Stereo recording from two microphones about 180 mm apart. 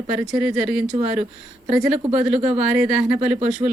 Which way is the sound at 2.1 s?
40° right (ahead or behind).